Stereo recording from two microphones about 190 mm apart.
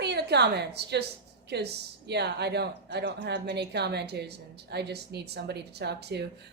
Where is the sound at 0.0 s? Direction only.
60° right (ahead or behind).